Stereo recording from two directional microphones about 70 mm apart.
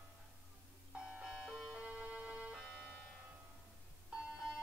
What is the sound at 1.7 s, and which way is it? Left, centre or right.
Music, centre.